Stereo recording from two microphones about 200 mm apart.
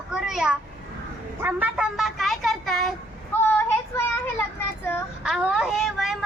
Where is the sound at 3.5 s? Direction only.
10° left (ahead or behind).